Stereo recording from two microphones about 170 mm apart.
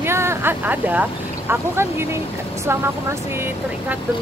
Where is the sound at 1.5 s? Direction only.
15° right (ahead or behind).